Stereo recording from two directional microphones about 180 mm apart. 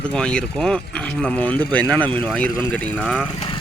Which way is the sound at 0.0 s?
5° left (ahead or behind).